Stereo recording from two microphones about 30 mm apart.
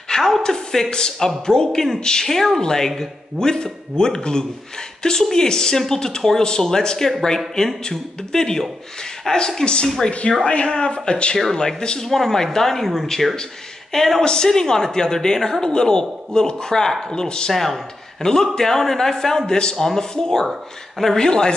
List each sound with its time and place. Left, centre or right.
0.1 s a sound: centre
0.4 s speech: left
6.4 s speech: left
10.0 s speech: left
12.0 s speech: centre
14.2 s speech: left
17.5 s speech: centre
18.2 s speech: left
19.4 s speech: left